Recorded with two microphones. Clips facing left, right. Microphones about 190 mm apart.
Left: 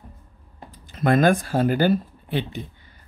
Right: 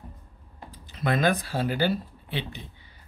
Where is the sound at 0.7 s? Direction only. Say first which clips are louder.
Left 7 dB; 50° left (ahead or behind).